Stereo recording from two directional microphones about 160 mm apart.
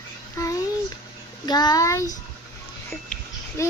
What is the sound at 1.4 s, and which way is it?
Speech, 25° left (ahead or behind).